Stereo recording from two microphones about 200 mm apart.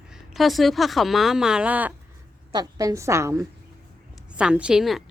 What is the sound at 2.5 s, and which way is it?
Speech, 20° right (ahead or behind).